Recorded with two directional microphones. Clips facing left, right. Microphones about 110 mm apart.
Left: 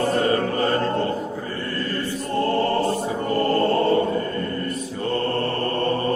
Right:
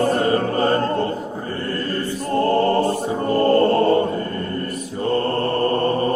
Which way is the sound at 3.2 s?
30° right (ahead or behind).